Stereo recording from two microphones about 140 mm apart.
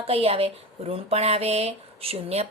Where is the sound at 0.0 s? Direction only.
45° right (ahead or behind).